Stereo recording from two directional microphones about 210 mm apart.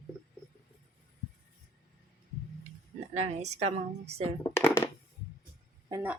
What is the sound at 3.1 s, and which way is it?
A woman's voice, 30° right (ahead or behind).